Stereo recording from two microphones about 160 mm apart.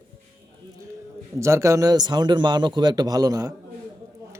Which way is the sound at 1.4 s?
20° right (ahead or behind).